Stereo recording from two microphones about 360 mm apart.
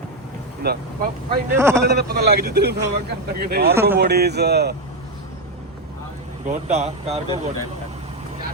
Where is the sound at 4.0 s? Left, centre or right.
Right.